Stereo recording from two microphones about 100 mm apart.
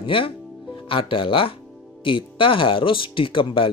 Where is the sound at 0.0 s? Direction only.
65° left (ahead or behind).